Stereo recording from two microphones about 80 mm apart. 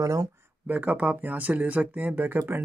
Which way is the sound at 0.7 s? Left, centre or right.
Centre.